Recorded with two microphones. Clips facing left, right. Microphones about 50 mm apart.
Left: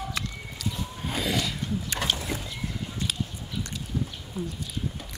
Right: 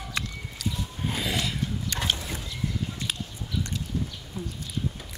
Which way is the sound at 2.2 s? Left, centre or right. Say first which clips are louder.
Left 3 dB; centre.